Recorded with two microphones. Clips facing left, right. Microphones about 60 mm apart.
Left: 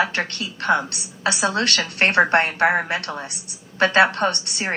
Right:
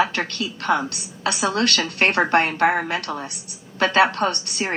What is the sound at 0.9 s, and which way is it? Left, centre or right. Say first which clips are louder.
Speech: left 1 dB; left.